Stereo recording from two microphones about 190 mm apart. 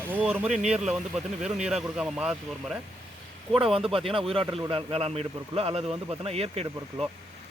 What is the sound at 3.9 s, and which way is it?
Speech, 30° right (ahead or behind).